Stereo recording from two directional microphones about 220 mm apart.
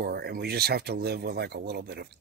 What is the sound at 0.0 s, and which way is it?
Speech, 45° right (ahead or behind).